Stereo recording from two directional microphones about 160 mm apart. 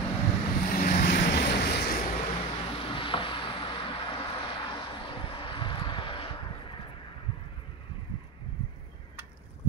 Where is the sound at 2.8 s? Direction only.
35° left (ahead or behind).